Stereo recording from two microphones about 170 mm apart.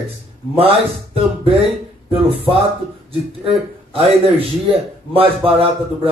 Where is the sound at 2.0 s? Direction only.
35° right (ahead or behind).